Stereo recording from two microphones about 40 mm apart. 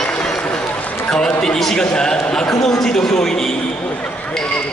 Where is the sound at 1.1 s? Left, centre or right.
Left.